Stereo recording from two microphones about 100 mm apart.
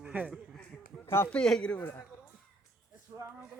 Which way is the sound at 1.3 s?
10° left (ahead or behind).